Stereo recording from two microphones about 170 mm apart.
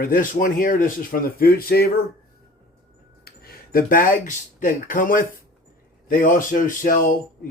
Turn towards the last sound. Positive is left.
turn(degrees=55)  # may be behind; listen again after turning